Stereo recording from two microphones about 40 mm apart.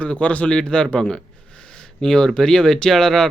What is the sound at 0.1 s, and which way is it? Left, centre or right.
Speech, left.